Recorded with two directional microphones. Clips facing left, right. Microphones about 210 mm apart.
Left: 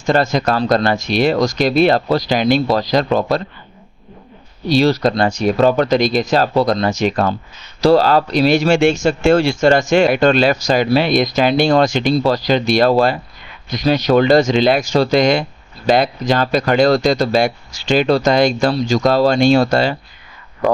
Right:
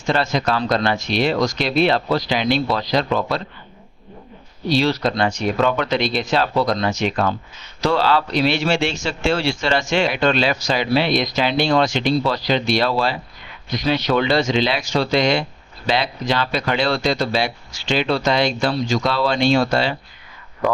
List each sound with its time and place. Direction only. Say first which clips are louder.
0.0 s speech: left 5 dB; 45° left (ahead or behind)
4.6 s speech: left 5 dB; 40° left (ahead or behind)